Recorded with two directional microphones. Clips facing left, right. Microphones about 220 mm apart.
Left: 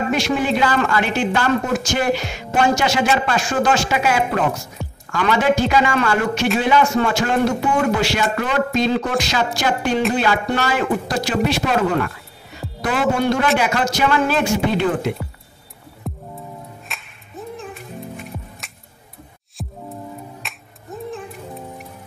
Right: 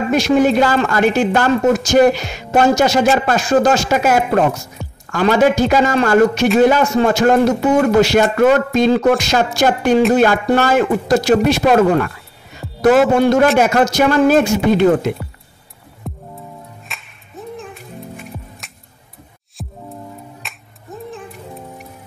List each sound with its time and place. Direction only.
0.1 s a man's voice: 45° right (ahead or behind)
12.6 s music: centre (ahead or behind)
13.2 s a man's voice: 45° right (ahead or behind)
16.0 s music: centre (ahead or behind)
19.6 s music: centre (ahead or behind)